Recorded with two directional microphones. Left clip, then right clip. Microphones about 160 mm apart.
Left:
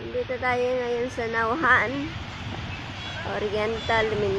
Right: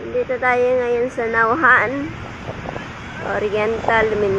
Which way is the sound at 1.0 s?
15° right (ahead or behind).